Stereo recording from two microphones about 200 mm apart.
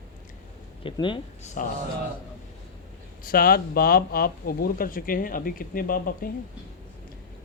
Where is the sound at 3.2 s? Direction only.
45° left (ahead or behind).